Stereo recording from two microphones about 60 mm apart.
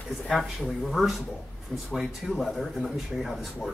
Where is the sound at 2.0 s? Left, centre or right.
Centre.